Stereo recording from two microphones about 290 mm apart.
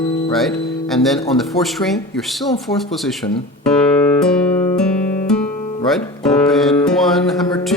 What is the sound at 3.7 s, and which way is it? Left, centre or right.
Guitar, centre.